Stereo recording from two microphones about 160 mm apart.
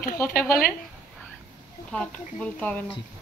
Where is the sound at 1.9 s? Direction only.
10° left (ahead or behind).